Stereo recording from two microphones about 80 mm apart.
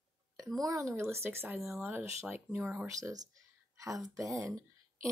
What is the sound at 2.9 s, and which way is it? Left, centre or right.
Speech, right.